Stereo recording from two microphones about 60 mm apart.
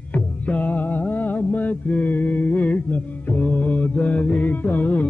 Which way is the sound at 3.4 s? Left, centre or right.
Left.